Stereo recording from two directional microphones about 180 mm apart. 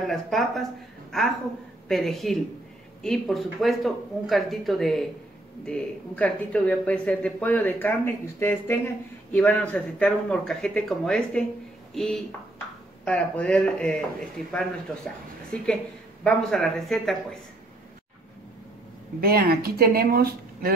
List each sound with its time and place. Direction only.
0.0 s speech: centre (ahead or behind)
19.2 s speech: 55° right (ahead or behind)